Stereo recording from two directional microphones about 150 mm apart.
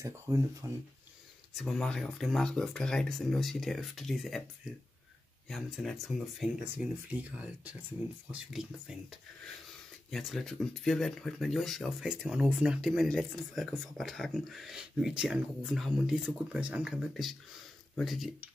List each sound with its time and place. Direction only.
0.0 s speech: 20° right (ahead or behind)
1.5 s speech: centre (ahead or behind)
5.5 s speech: centre (ahead or behind)
6.6 s speech: 10° right (ahead or behind)